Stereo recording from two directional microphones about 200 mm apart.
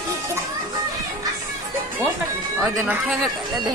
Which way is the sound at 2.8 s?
5° right (ahead or behind).